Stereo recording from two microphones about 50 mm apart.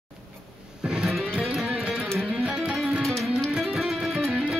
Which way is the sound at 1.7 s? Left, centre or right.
Right.